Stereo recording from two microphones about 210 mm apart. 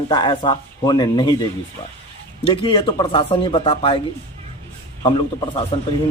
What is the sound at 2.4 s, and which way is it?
A man's voice, 25° left (ahead or behind).